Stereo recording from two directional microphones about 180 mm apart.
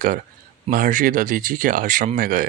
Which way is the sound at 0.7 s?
50° right (ahead or behind).